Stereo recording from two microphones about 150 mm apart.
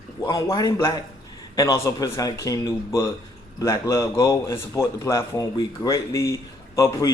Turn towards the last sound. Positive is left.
turn(degrees=20)  # may be behind; listen again after turning